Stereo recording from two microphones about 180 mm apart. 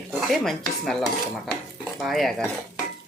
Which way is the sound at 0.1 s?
Centre (ahead or behind).